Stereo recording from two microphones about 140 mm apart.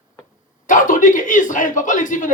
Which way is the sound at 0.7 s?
70° left (ahead or behind).